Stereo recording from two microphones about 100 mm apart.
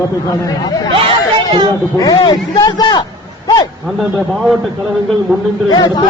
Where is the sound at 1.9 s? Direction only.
40° left (ahead or behind).